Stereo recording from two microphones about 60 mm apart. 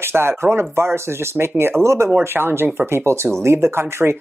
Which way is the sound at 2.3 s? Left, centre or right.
Right.